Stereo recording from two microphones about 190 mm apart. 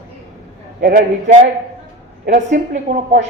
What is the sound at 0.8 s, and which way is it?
A man's voice, 45° right (ahead or behind).